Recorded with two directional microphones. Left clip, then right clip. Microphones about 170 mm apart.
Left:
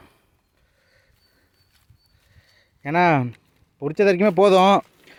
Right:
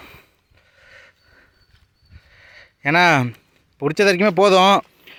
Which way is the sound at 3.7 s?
15° right (ahead or behind).